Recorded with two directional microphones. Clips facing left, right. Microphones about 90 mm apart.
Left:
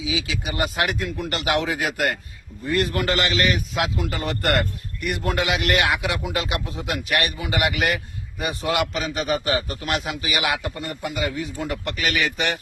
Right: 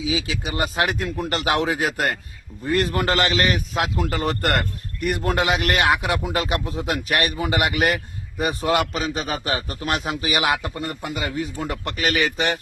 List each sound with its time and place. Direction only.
0.0 s a man's voice: 35° right (ahead or behind)